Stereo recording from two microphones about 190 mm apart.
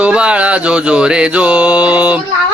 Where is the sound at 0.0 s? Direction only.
5° right (ahead or behind).